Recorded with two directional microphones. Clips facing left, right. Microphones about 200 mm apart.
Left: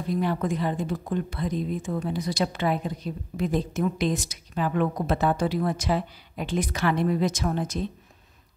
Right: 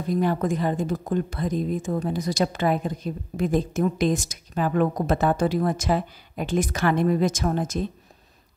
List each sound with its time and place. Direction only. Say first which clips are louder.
0.1 s a woman's voice: right 3 dB; 45° right (ahead or behind)